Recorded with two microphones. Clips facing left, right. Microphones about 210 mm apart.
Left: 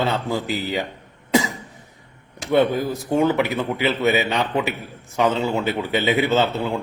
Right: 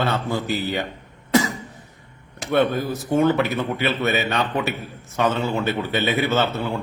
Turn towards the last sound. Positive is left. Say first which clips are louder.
# left 2 dB
turn(degrees=15)  # may be behind; listen again after turning